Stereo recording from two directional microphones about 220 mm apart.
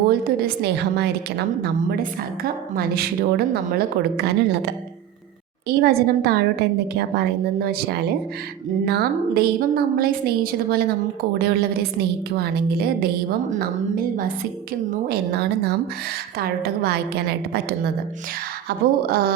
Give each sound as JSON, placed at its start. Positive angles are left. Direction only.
{"t": 0.3, "sound": "a woman's voice", "side_deg": -45}
{"t": 18.7, "sound": "a woman's voice", "side_deg": -45}